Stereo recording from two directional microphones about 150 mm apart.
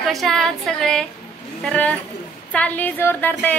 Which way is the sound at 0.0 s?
Centre (ahead or behind).